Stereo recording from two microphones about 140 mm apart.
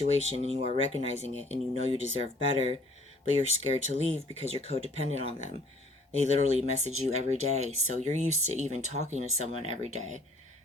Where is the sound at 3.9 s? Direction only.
45° right (ahead or behind).